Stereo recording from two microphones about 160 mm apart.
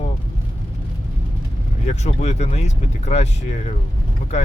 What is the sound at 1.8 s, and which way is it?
Speech, 45° left (ahead or behind).